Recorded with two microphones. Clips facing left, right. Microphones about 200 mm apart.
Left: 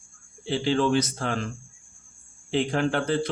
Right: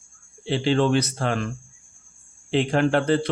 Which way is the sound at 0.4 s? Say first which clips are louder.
Right 3 dB; 70° right (ahead or behind).